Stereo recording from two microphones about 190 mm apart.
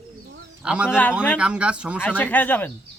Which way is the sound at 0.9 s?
10° left (ahead or behind).